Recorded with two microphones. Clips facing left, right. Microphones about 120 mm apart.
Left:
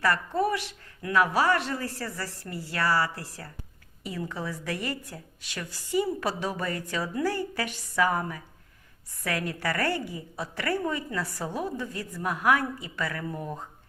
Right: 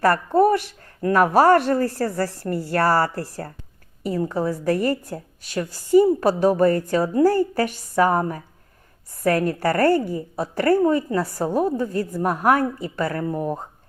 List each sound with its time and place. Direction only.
0.0 s speech: 50° right (ahead or behind)